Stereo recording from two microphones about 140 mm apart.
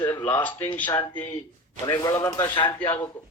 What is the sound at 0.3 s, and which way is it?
Speech, 15° left (ahead or behind).